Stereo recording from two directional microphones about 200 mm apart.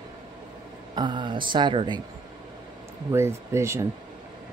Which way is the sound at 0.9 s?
25° right (ahead or behind).